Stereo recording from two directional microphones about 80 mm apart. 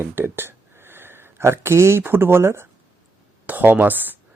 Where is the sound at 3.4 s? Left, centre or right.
Right.